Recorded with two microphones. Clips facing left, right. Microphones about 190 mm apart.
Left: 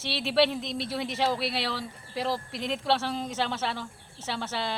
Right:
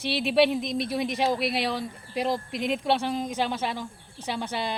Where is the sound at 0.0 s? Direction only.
15° right (ahead or behind).